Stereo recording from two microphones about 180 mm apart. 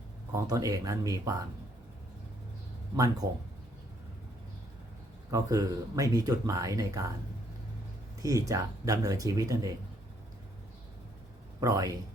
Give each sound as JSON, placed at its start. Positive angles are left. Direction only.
{"t": 0.3, "sound": "speech", "side_deg": -20}
{"t": 2.9, "sound": "speech", "side_deg": -20}
{"t": 5.3, "sound": "speech", "side_deg": -20}
{"t": 8.2, "sound": "speech", "side_deg": -20}
{"t": 11.6, "sound": "speech", "side_deg": -20}